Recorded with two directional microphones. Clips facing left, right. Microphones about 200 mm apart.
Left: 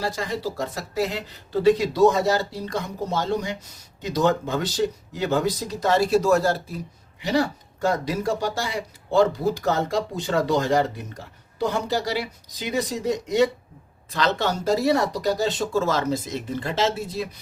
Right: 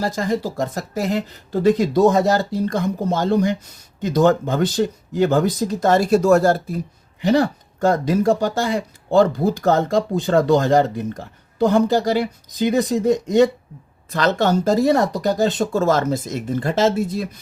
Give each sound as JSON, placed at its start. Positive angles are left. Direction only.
{"t": 0.0, "sound": "speech", "side_deg": -45}